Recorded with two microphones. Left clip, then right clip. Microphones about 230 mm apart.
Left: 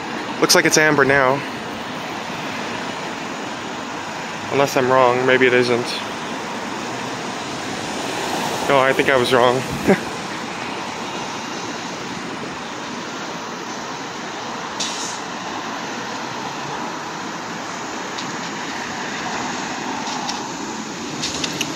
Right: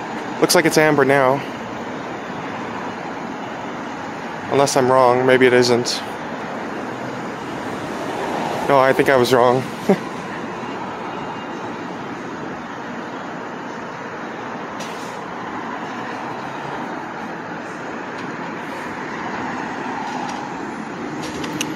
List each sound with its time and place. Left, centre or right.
0.4 s speech: centre
4.6 s speech: centre
8.6 s speech: centre
9.9 s speech: centre